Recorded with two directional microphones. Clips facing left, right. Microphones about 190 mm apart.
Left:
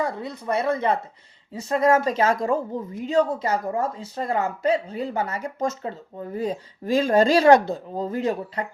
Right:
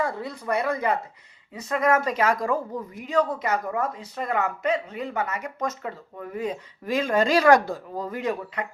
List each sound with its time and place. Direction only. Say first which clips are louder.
0.0 s speech: left 1 dB; 20° left (ahead or behind)